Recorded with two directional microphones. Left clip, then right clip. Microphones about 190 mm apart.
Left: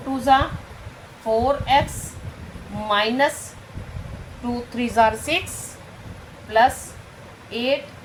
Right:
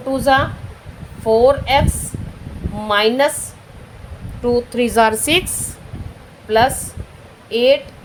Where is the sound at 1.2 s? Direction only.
60° right (ahead or behind).